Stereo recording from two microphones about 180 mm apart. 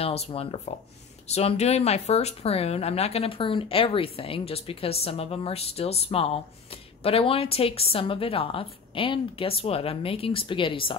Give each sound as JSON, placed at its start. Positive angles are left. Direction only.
{"t": 0.0, "sound": "speech", "side_deg": 35}